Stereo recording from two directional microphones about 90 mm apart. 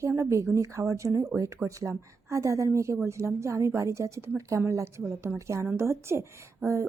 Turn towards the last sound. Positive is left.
turn(degrees=-30)  # may be behind; listen again after turning